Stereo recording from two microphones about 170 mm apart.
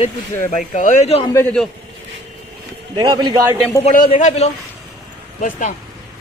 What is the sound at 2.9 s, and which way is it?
Speech, 25° right (ahead or behind).